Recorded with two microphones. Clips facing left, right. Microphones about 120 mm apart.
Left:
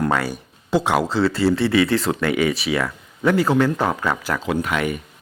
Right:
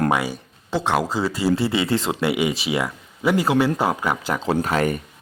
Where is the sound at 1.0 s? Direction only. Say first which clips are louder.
Left 3 dB; 10° right (ahead or behind).